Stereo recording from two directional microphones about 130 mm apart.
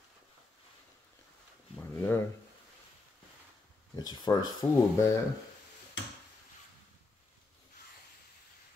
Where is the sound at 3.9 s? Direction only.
30° left (ahead or behind).